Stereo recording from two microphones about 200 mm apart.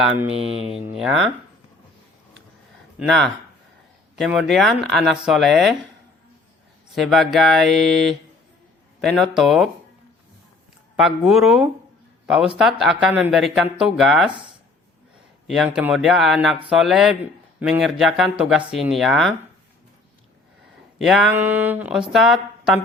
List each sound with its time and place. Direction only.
0.3 s mantra: 30° right (ahead or behind)
0.7 s speech: 5° right (ahead or behind)
3.0 s speech: centre (ahead or behind)
6.9 s speech: centre (ahead or behind)
10.9 s speech: centre (ahead or behind)
15.4 s speech: centre (ahead or behind)
21.0 s a woman's voice: centre (ahead or behind)